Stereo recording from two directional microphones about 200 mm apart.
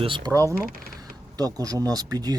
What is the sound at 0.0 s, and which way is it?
Speech, 25° right (ahead or behind).